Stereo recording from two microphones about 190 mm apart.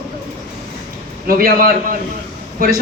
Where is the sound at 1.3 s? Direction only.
50° right (ahead or behind).